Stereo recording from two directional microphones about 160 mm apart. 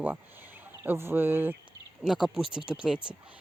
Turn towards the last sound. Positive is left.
turn(degrees=-5)  # may be behind; listen again after turning